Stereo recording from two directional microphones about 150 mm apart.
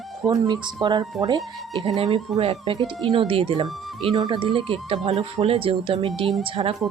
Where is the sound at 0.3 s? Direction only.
30° right (ahead or behind).